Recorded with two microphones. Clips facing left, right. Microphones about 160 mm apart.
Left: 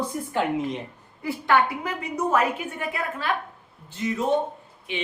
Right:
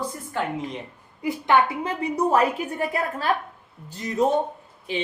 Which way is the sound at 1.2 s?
20° right (ahead or behind).